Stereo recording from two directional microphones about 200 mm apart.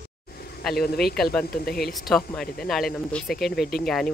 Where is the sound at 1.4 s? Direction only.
50° left (ahead or behind).